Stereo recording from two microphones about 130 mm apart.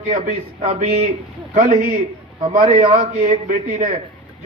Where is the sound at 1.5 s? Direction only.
70° right (ahead or behind).